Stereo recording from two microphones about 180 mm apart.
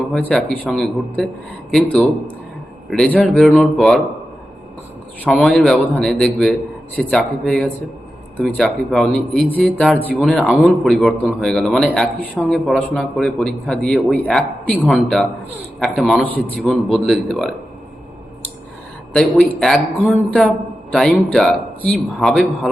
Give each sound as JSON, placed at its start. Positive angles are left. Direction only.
{"t": 0.1, "sound": "speech", "side_deg": 5}
{"t": 5.3, "sound": "speech", "side_deg": 0}
{"t": 19.1, "sound": "speech", "side_deg": 5}